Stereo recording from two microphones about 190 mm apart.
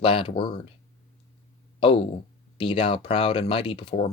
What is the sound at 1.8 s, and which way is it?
A man's voice, 30° left (ahead or behind).